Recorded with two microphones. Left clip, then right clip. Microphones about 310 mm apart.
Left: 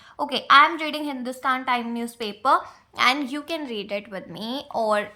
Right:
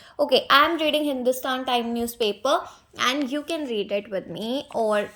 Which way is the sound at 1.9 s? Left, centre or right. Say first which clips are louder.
Right 6 dB; centre.